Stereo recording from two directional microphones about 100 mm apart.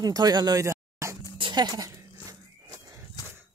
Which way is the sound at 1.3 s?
50° right (ahead or behind).